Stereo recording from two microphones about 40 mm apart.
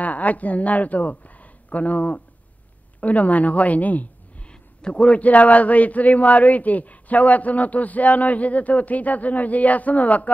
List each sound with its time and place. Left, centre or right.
0.0 s a man's voice: left
4.5 s a man's voice: left